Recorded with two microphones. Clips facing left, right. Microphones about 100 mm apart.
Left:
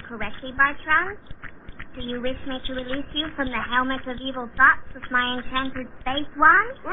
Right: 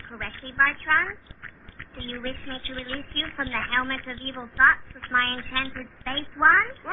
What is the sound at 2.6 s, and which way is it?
Speech, 30° left (ahead or behind).